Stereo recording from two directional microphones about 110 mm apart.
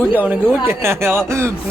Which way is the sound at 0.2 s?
20° right (ahead or behind).